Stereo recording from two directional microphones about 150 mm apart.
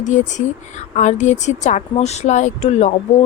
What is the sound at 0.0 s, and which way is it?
Speech, 55° left (ahead or behind).